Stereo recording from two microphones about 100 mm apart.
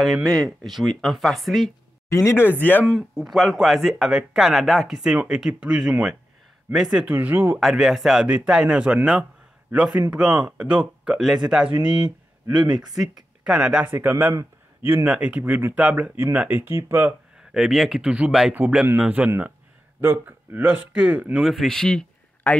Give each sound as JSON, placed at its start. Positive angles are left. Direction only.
{"t": 0.0, "sound": "speech", "side_deg": 0}
{"t": 2.0, "sound": "speech", "side_deg": 30}
{"t": 3.2, "sound": "speech", "side_deg": 0}
{"t": 7.1, "sound": "speech", "side_deg": -15}
{"t": 7.5, "sound": "a man's voice", "side_deg": -5}
{"t": 12.6, "sound": "speech", "side_deg": -45}
{"t": 13.4, "sound": "speech", "side_deg": -10}
{"t": 17.4, "sound": "speech", "side_deg": -5}
{"t": 21.5, "sound": "a man's voice", "side_deg": 0}